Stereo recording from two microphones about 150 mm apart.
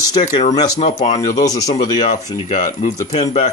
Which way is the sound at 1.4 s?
25° left (ahead or behind).